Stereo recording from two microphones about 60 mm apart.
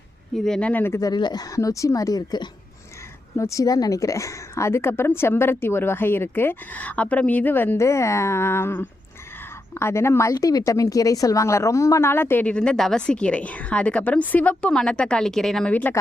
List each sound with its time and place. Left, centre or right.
0.3 s speech: centre
0.9 s speech: left
3.3 s speech: left
7.8 s speech: left
10.7 s speech: left
12.0 s speech: left
12.5 s a woman's voice: centre
14.6 s speech: centre
15.7 s speech: left